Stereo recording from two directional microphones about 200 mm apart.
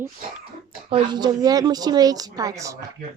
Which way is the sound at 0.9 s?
25° right (ahead or behind).